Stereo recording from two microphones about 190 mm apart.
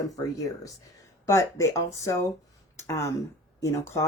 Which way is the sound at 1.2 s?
15° left (ahead or behind).